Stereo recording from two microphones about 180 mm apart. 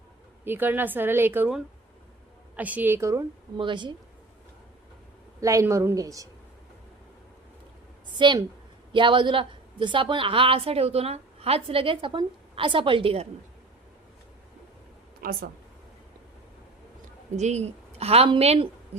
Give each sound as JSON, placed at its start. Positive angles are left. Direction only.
{"t": 0.4, "sound": "a woman's voice", "side_deg": -10}
{"t": 5.4, "sound": "a woman's voice", "side_deg": -15}
{"t": 8.2, "sound": "a woman's voice", "side_deg": -25}
{"t": 15.2, "sound": "speech", "side_deg": -55}
{"t": 17.3, "sound": "a woman's voice", "side_deg": -40}